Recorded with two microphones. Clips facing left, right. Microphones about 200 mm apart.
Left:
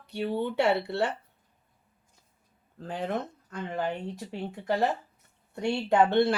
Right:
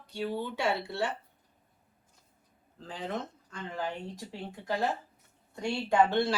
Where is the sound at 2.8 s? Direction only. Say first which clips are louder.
Left 5 dB; 60° left (ahead or behind).